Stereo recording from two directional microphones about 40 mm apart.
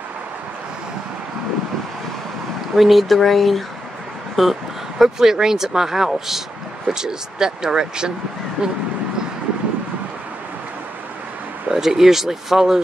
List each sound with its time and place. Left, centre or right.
2.7 s speech: centre
11.7 s speech: centre